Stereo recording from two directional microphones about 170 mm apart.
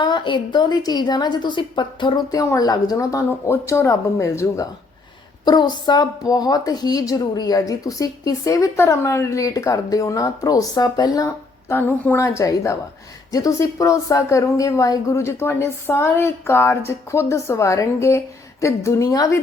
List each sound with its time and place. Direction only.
0.0 s a woman's voice: 30° left (ahead or behind)